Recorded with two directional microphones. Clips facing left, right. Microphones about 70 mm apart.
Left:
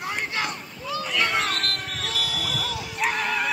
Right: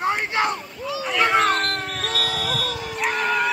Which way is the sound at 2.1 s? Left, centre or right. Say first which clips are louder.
Right 4 dB; right.